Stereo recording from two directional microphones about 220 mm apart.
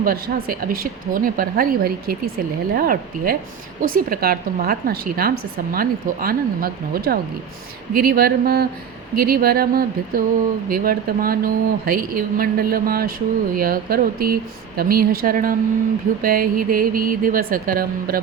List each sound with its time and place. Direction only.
0.0 s a woman's voice: 40° right (ahead or behind)